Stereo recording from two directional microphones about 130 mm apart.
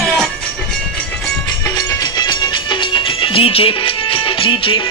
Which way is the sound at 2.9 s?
40° left (ahead or behind).